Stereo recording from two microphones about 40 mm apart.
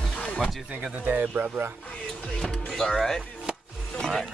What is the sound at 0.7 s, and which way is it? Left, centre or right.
Speech, right.